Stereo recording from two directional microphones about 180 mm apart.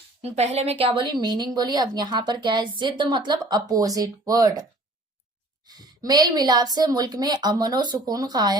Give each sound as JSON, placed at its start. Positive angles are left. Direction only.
{"t": 0.2, "sound": "a woman's voice", "side_deg": -35}
{"t": 5.6, "sound": "a woman's voice", "side_deg": -20}